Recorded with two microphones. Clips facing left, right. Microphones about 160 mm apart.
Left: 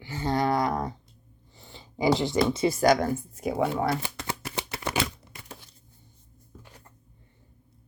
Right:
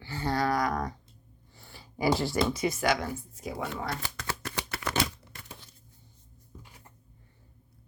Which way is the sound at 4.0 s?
20° left (ahead or behind).